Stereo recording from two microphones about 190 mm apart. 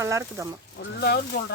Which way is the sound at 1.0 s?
60° left (ahead or behind).